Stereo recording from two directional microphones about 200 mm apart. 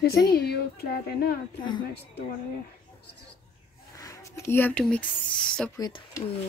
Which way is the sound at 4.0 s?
15° left (ahead or behind).